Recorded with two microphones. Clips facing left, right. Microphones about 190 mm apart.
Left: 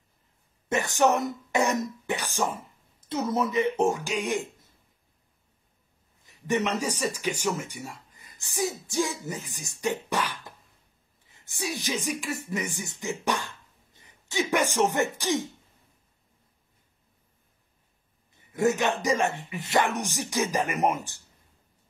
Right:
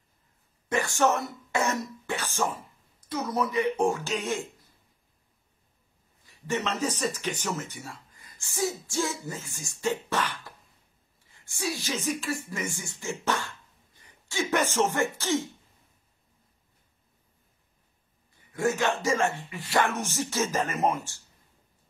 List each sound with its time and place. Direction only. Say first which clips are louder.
0.7 s speech: left 2 dB; 20° left (ahead or behind)
6.2 s speech: left 3 dB; 15° left (ahead or behind)
18.5 s speech: left 2 dB; 20° left (ahead or behind)